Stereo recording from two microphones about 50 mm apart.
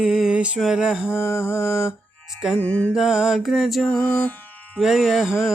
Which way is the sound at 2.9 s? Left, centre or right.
Centre.